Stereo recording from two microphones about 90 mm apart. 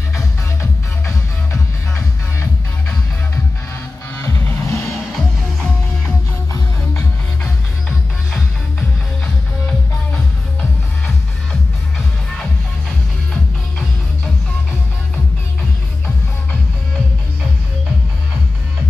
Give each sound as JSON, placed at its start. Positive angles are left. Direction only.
{"t": 0.6, "sound": "music", "side_deg": 35}
{"t": 4.2, "sound": "music", "side_deg": 35}
{"t": 13.3, "sound": "music", "side_deg": 10}